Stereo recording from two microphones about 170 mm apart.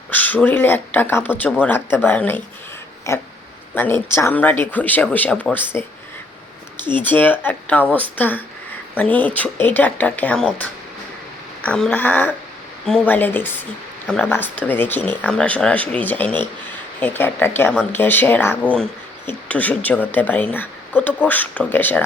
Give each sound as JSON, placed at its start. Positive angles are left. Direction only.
{"t": 0.1, "sound": "speech", "side_deg": 10}
{"t": 7.0, "sound": "speech", "side_deg": 10}
{"t": 11.6, "sound": "speech", "side_deg": 5}